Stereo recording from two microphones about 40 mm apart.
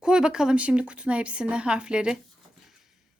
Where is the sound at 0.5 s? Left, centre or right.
Right.